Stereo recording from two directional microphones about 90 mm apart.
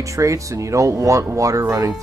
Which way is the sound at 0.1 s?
35° right (ahead or behind).